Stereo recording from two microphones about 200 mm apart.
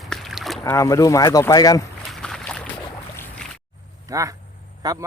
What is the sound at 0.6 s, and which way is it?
Speech, 15° left (ahead or behind).